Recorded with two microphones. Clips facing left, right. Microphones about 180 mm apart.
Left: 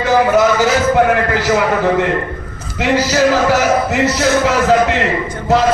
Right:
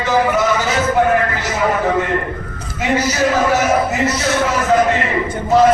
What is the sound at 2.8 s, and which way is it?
A man's voice, 80° left.